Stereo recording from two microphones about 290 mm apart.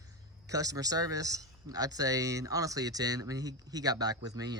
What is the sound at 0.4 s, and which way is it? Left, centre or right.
Speech, centre.